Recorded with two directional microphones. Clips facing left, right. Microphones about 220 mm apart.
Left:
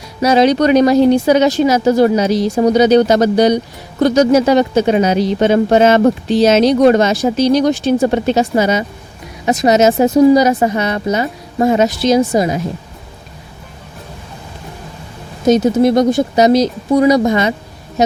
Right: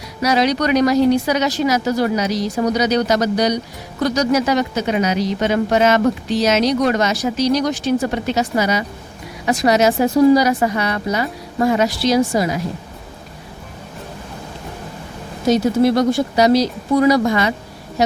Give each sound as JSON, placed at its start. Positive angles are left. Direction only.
{"t": 0.2, "sound": "speech", "side_deg": 25}
{"t": 15.4, "sound": "speech", "side_deg": 20}